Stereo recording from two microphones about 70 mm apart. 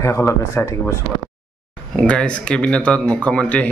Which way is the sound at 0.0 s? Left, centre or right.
Left.